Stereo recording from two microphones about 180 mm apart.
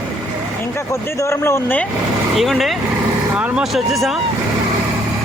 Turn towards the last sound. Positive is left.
turn(degrees=0)  # may be behind; listen again after turning